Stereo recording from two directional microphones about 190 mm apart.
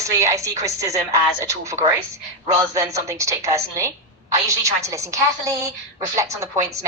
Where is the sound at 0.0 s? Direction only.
15° right (ahead or behind).